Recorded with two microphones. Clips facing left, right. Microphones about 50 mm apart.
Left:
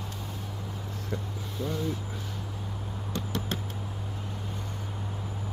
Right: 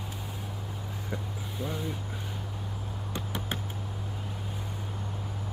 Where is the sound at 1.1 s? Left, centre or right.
Centre.